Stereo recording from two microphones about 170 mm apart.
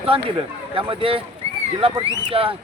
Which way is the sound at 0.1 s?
30° right (ahead or behind).